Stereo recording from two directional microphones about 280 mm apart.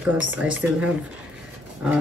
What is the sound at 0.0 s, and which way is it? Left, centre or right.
Speech, centre.